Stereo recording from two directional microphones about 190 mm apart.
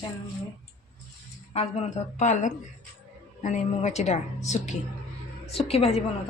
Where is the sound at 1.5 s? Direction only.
35° left (ahead or behind).